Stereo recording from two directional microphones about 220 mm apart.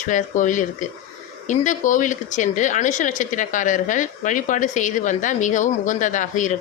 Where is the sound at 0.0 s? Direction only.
35° left (ahead or behind).